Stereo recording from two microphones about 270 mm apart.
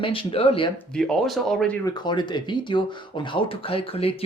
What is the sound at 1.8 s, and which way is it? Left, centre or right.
Speech, centre.